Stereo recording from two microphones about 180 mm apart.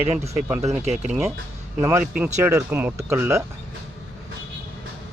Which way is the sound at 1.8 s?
15° right (ahead or behind).